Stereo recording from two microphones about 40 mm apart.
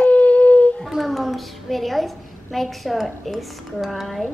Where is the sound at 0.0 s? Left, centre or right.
Left.